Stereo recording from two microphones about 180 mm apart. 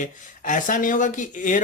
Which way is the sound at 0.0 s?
45° left (ahead or behind).